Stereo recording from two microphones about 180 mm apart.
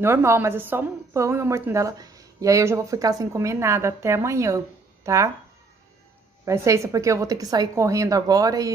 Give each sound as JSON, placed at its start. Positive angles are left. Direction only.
{"t": 0.0, "sound": "a woman's voice", "side_deg": -15}
{"t": 6.4, "sound": "a woman's voice", "side_deg": -15}